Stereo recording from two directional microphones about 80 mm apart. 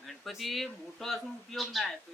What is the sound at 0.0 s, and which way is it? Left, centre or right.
Speech, centre.